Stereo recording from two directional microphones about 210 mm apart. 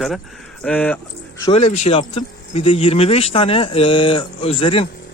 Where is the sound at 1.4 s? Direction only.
30° left (ahead or behind).